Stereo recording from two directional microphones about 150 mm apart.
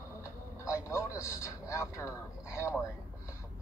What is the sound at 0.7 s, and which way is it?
A man's voice, 20° left (ahead or behind).